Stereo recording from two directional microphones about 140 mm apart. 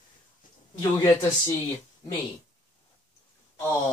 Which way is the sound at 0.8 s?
25° left (ahead or behind).